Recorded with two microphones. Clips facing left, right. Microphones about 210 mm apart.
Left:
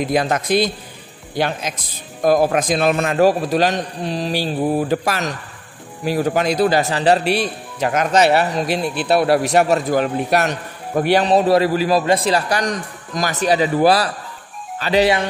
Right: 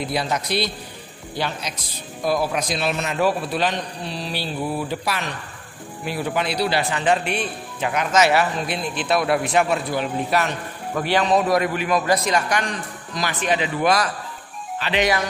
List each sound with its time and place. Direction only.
0.0 s a man's voice: 50° left (ahead or behind)
11.1 s speech: 35° left (ahead or behind)